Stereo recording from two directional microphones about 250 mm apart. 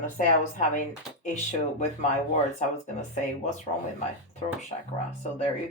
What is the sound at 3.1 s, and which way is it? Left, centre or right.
Speech, left.